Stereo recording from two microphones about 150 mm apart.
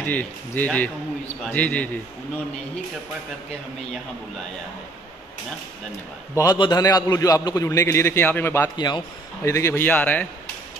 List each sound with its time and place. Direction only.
0.0 s speech: 10° left (ahead or behind)
6.3 s a man's voice: 25° left (ahead or behind)
8.7 s a man's voice: 30° left (ahead or behind)
9.4 s speech: 20° left (ahead or behind)